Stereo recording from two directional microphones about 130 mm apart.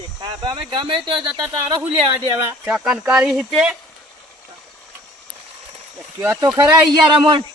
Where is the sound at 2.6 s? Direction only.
5° right (ahead or behind).